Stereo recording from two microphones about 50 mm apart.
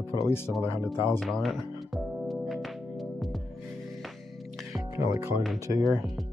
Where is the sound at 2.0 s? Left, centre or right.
Centre.